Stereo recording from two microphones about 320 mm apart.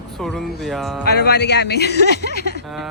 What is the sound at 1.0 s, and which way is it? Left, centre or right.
Speech, left.